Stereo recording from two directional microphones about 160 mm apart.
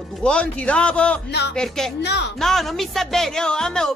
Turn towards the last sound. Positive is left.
turn(degrees=5)  # may be behind; listen again after turning